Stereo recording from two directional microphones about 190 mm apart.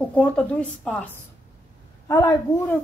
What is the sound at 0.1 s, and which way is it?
A woman's voice, 5° left (ahead or behind).